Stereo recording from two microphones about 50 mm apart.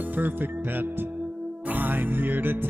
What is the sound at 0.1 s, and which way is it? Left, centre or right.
Music, right.